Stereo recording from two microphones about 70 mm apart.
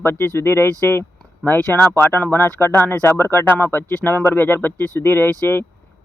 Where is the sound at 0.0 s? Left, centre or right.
Left.